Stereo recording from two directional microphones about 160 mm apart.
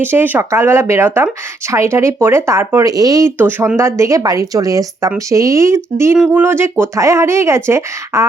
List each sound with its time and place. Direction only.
0.0 s speech: 15° right (ahead or behind)